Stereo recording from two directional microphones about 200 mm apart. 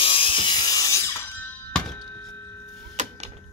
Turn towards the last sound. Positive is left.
turn(degrees=-35)  # may be behind; listen again after turning